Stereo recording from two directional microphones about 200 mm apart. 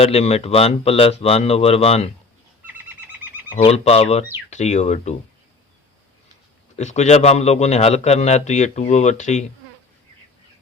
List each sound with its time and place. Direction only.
0.0 s a man's voice: 30° left (ahead or behind)
3.6 s a man's voice: 30° left (ahead or behind)
6.7 s a man's voice: 35° left (ahead or behind)